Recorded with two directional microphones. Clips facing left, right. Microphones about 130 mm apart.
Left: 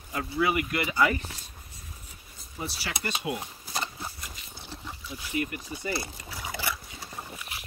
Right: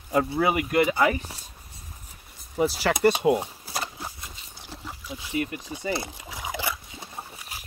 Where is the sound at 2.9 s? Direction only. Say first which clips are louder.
Right 13 dB; 45° right (ahead or behind).